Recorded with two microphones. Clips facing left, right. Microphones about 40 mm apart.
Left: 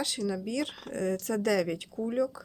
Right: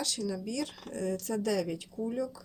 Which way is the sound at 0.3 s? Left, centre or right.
Left.